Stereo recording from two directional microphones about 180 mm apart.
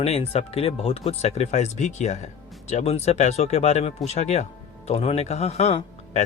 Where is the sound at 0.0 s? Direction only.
35° left (ahead or behind).